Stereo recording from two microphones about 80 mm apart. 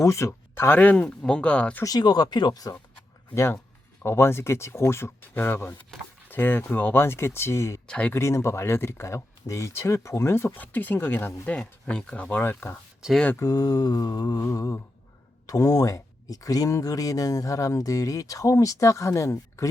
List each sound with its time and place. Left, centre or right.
0.0 s speech: left
0.7 s speech: left
1.8 s mantra: left
3.3 s speech: left
7.9 s speech: centre
8.1 s speech: left
11.4 s speech: centre
12.4 s speech: left
13.0 s speech: centre
13.4 s mantra: left
14.4 s speech: left